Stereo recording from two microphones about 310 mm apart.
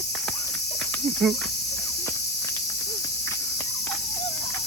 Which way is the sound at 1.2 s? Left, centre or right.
Centre.